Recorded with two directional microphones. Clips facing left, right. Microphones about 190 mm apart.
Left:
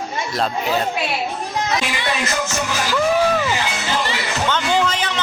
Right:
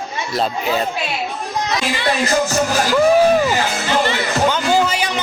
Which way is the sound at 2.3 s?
40° right (ahead or behind).